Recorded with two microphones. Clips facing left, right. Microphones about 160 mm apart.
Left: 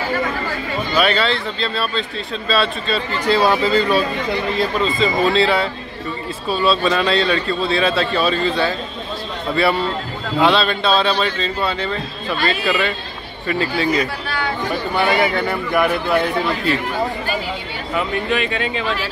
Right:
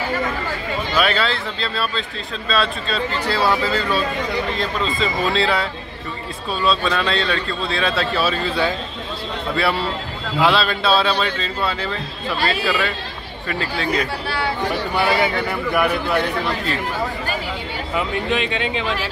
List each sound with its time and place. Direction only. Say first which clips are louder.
0.9 s a man's voice: left 3 dB; centre (ahead or behind)
3.3 s speech: left 5 dB; 20° left (ahead or behind)
4.6 s a man's voice: left 4 dB; centre (ahead or behind)
14.2 s speech: even; 30° right (ahead or behind)
15.4 s a man's voice: left 2 dB; centre (ahead or behind)
17.9 s speech: left 1 dB; 20° right (ahead or behind)